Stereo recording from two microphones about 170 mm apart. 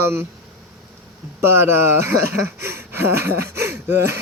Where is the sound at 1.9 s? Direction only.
15° right (ahead or behind).